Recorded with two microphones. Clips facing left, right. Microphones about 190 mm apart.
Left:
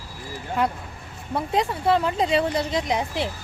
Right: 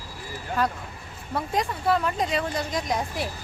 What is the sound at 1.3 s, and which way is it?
Speech, 25° left (ahead or behind).